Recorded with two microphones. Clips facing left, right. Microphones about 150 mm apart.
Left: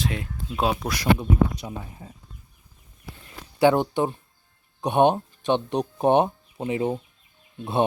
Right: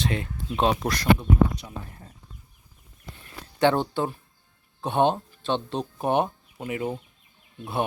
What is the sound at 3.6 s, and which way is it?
Speech, 15° left (ahead or behind).